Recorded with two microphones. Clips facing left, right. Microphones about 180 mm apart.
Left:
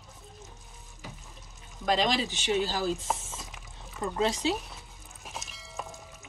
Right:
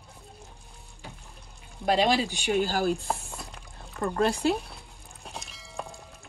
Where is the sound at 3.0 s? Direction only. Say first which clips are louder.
Right 1 dB; centre (ahead or behind).